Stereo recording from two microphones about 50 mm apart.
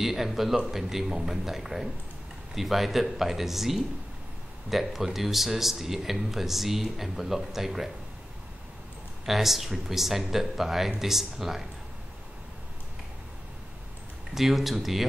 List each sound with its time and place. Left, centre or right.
0.0 s speech: centre
9.2 s speech: centre
14.3 s speech: centre